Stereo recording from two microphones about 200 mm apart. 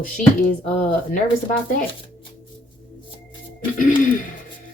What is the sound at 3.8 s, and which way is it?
Speech, 40° left (ahead or behind).